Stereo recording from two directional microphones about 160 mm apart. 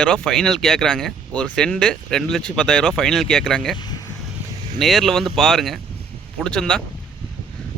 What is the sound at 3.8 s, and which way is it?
Vehicle, 25° left (ahead or behind).